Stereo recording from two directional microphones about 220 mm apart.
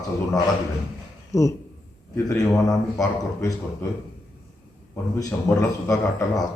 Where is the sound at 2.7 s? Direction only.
15° left (ahead or behind).